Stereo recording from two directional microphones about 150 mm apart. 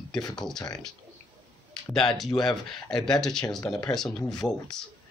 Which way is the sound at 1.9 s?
Centre (ahead or behind).